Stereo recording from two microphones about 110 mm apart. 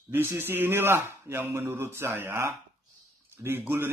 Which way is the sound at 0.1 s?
20° right (ahead or behind).